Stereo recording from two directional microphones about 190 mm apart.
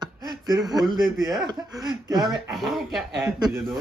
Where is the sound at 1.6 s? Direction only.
20° right (ahead or behind).